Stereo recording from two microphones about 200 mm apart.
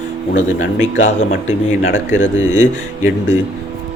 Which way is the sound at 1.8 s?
80° left.